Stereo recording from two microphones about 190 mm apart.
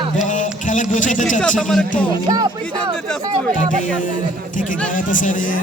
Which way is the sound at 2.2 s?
20° right (ahead or behind).